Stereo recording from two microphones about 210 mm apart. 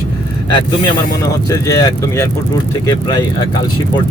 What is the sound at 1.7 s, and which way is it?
Speech, 15° left (ahead or behind).